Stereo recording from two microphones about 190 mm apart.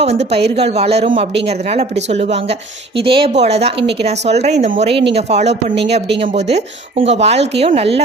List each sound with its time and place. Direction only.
0.0 s speech: 35° right (ahead or behind)
3.0 s speech: 30° right (ahead or behind)
7.0 s speech: 35° right (ahead or behind)